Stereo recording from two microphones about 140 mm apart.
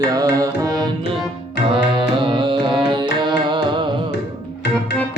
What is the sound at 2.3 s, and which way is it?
Carnatic music, 35° right (ahead or behind).